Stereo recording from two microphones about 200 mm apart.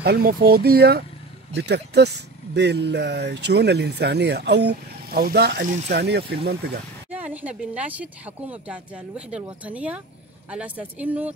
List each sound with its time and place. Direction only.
0.0 s speech: 50° right (ahead or behind)
7.1 s a woman's voice: 10° right (ahead or behind)